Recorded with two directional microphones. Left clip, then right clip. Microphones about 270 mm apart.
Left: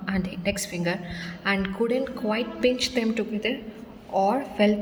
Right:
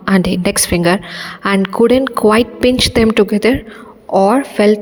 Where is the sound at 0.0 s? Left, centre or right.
Right.